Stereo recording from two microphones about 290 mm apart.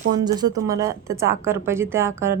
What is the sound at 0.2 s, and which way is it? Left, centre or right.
Speech, centre.